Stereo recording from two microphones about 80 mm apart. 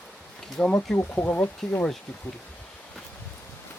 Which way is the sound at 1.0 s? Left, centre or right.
Left.